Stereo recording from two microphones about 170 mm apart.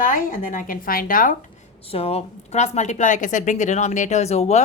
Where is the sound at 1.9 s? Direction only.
35° left (ahead or behind).